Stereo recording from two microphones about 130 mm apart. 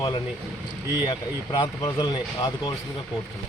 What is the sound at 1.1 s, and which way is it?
Speech, 35° left (ahead or behind).